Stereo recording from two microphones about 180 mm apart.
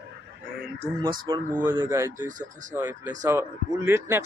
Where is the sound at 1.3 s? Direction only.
25° right (ahead or behind).